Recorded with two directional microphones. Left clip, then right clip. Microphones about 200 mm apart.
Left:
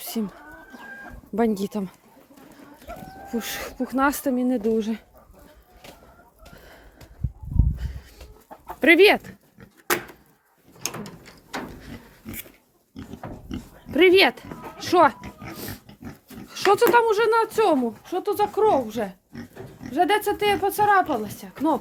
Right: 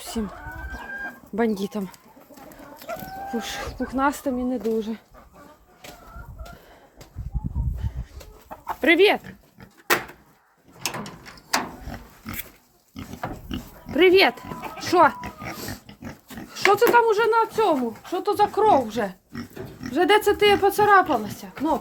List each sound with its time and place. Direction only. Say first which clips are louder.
0.0 s chicken: even; 20° left (ahead or behind)
1.4 s speech: left 1 dB; 20° left (ahead or behind)
2.7 s livestock: right 6 dB; 40° right (ahead or behind)
3.2 s speech: left 1 dB; 30° left (ahead or behind)
8.8 s speech: left 2 dB; 35° left (ahead or behind)
10.8 s drawer open or close: right 3 dB; 15° left (ahead or behind)
13.9 s speech: even; 20° left (ahead or behind)
16.5 s speech: even; 20° left (ahead or behind); by 17.7 s 35° left (ahead or behind)
18.0 s speech: right 2 dB; 10° left (ahead or behind)